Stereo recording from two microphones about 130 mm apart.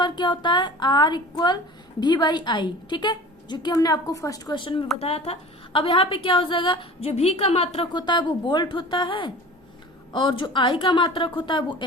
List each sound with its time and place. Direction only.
0.0 s a woman's voice: 35° left (ahead or behind)
4.9 s a woman's voice: 50° left (ahead or behind)
8.0 s a woman's voice: 35° left (ahead or behind)